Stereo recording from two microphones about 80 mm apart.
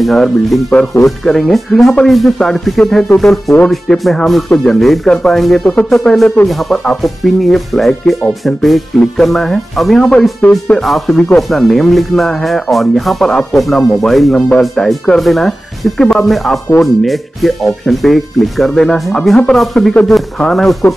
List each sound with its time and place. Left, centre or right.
0.0 s speech: centre
10.4 s speech: centre
10.8 s speech: centre
19.3 s speech: centre